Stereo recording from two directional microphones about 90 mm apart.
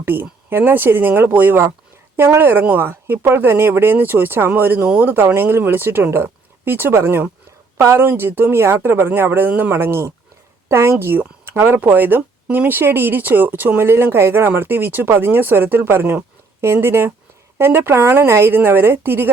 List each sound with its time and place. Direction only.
0.0 s speech: 25° right (ahead or behind)